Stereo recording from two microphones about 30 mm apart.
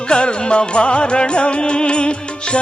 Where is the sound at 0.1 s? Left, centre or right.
Left.